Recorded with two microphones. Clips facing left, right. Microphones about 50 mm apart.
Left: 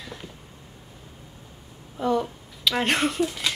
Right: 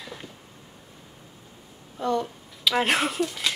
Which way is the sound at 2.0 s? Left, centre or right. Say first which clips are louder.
Left 2 dB; centre.